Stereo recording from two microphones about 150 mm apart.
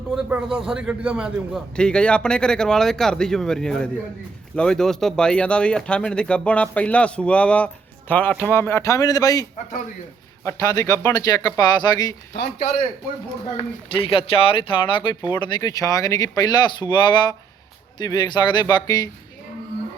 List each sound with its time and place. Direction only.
0.1 s speech: 5° right (ahead or behind)
1.7 s speech: 5° left (ahead or behind); by 12.1 s 25° left (ahead or behind)
13.6 s speech: 40° left (ahead or behind)